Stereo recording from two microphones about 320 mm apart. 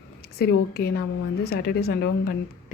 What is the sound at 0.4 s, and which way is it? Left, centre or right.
A woman's voice, left.